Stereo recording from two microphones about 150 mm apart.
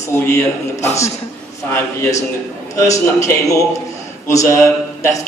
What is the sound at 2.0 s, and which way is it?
A man's voice, 20° left (ahead or behind).